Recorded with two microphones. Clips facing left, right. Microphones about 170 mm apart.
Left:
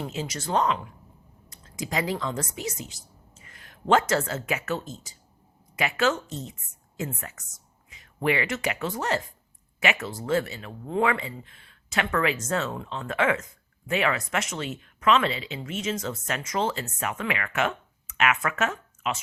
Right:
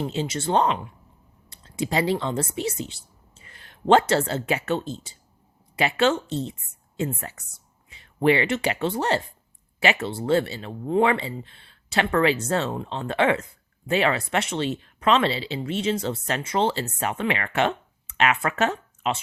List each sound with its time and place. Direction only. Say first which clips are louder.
0.0 s a woman's voice: right 6 dB; 25° right (ahead or behind)